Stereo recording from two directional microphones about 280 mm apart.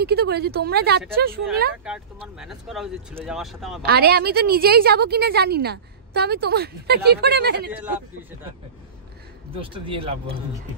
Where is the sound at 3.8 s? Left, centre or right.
Right.